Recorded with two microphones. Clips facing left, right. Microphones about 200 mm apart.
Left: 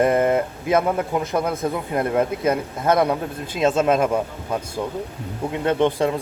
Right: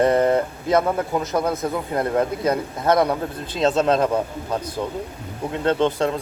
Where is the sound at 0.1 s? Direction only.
20° left (ahead or behind).